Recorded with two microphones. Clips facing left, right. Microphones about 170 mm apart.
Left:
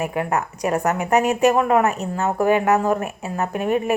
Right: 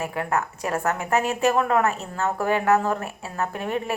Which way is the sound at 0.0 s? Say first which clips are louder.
Left 3 dB; 15° left (ahead or behind).